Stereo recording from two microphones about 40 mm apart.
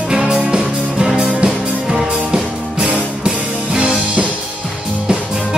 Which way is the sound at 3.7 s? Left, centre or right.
Centre.